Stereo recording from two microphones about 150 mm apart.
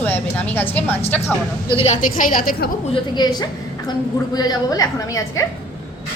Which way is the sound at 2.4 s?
75° left (ahead or behind).